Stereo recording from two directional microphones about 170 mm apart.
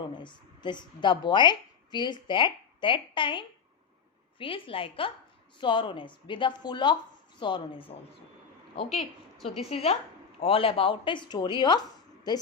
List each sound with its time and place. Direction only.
0.2 s a woman's voice: 25° left (ahead or behind)
8.9 s a woman's voice: centre (ahead or behind)
9.6 s a woman's voice: 35° left (ahead or behind)